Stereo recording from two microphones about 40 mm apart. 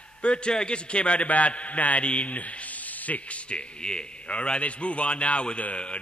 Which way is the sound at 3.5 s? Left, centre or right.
Left.